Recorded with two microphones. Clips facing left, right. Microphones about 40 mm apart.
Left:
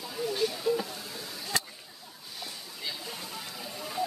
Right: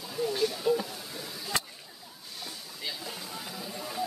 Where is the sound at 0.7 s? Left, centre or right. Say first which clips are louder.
Right 2 dB; centre.